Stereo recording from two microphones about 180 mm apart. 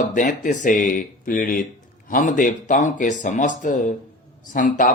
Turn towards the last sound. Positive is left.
turn(degrees=50)  # may be behind; listen again after turning